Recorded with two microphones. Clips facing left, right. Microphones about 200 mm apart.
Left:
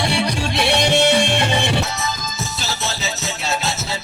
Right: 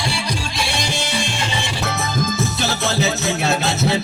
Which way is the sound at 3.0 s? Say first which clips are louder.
Right 6 dB; 55° right (ahead or behind).